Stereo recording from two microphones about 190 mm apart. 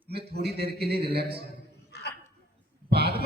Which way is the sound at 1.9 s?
60° left (ahead or behind).